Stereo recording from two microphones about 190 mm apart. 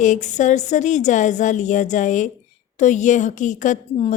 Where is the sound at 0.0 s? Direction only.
40° left (ahead or behind).